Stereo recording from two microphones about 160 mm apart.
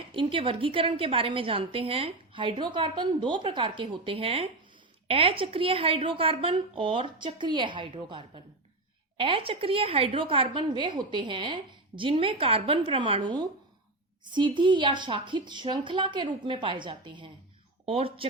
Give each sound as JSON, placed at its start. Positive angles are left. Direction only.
{"t": 0.1, "sound": "a woman's voice", "side_deg": -35}